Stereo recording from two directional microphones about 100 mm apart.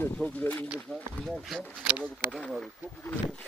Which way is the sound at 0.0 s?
15° left (ahead or behind).